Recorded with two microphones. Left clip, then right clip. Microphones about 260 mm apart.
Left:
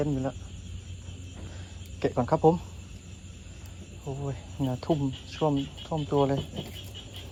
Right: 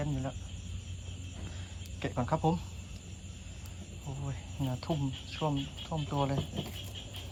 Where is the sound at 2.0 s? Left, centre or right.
Centre.